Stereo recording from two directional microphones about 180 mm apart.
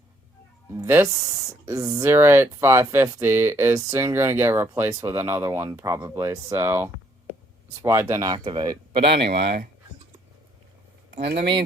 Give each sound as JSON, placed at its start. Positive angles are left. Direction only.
{"t": 0.8, "sound": "speech", "side_deg": -15}
{"t": 9.3, "sound": "speech", "side_deg": -70}
{"t": 11.3, "sound": "speech", "side_deg": -65}